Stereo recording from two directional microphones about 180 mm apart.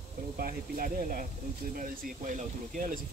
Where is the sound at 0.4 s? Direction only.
50° right (ahead or behind).